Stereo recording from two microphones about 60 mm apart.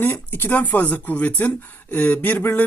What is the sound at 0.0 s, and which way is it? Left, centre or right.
Speech, left.